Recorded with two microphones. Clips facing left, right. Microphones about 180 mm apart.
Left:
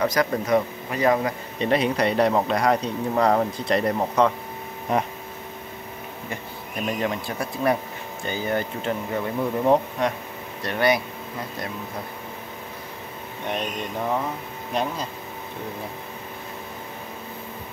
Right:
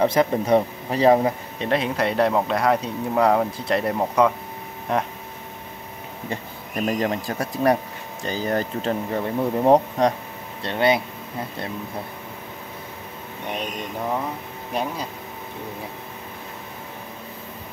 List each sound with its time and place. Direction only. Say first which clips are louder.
0.0 s speech: right 3 dB; 25° right (ahead or behind)
1.6 s speech: left 2 dB; centre (ahead or behind)
6.9 s speech: right 2 dB; 35° right (ahead or behind)
10.6 s speech: right 1 dB; 25° right (ahead or behind)
14.7 s speech: even; 10° right (ahead or behind)